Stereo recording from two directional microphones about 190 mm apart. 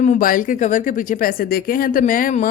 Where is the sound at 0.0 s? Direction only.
45° left (ahead or behind).